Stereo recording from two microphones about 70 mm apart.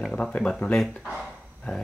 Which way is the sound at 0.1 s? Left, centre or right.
Centre.